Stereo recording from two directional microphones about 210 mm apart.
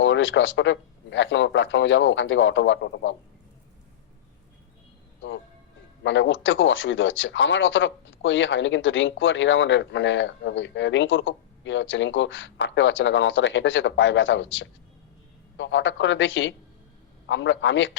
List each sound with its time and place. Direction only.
0.0 s speech: 60° left (ahead or behind)
6.0 s speech: 60° left (ahead or behind)